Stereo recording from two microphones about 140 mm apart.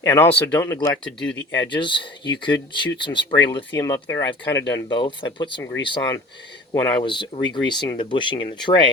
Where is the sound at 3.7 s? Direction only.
20° left (ahead or behind).